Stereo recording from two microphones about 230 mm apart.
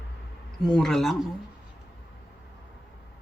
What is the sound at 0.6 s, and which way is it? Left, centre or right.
Speech, centre.